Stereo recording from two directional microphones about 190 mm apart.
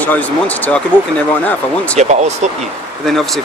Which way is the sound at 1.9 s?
35° right (ahead or behind).